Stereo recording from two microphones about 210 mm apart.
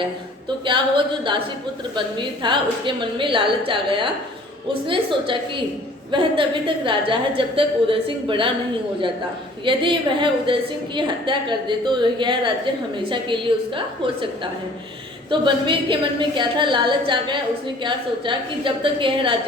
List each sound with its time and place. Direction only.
0.0 s a woman's voice: 25° right (ahead or behind)
9.6 s a woman's voice: 25° right (ahead or behind)
15.3 s a woman's voice: 20° right (ahead or behind)